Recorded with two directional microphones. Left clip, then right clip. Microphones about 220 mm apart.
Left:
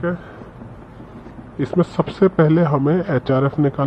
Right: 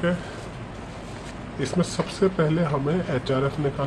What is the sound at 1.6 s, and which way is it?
A man's voice, 20° left (ahead or behind).